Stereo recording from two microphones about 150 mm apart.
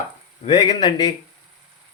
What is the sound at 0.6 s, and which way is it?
Speech, 30° left (ahead or behind).